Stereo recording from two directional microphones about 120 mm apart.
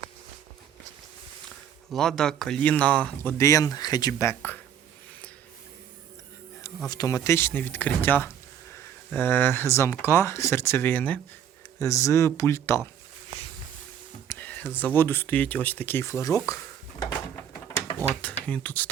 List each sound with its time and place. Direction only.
1.9 s speech: 5° left (ahead or behind); by 4.6 s 20° left (ahead or behind)
6.8 s speech: 30° left (ahead or behind)
14.3 s speech: 15° left (ahead or behind)
18.1 s speech: 15° left (ahead or behind)